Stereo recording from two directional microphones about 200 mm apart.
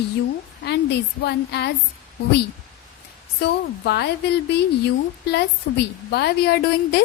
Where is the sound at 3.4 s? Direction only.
55° left (ahead or behind).